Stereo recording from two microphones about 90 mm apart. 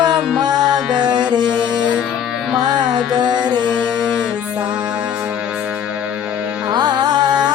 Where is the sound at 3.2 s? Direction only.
55° right (ahead or behind).